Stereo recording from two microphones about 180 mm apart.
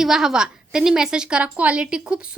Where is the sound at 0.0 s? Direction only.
5° right (ahead or behind).